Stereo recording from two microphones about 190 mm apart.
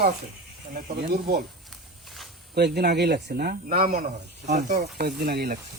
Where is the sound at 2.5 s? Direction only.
55° right (ahead or behind); by 4.7 s 40° right (ahead or behind).